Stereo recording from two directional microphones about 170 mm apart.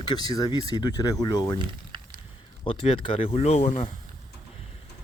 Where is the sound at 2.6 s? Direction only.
35° left (ahead or behind).